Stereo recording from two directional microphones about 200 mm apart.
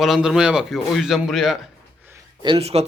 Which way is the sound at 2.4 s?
25° right (ahead or behind).